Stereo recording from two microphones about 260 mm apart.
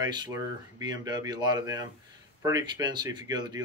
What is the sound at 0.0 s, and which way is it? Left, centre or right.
Speech, centre.